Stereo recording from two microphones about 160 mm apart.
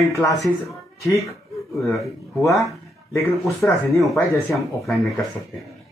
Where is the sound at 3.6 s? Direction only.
10° left (ahead or behind).